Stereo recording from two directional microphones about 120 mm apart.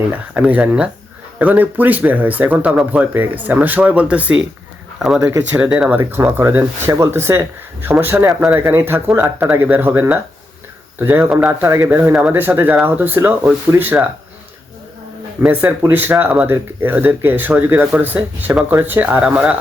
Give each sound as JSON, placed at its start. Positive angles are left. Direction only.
{"t": 0.1, "sound": "speech", "side_deg": -15}
{"t": 6.0, "sound": "speech", "side_deg": -20}
{"t": 15.4, "sound": "speech", "side_deg": -10}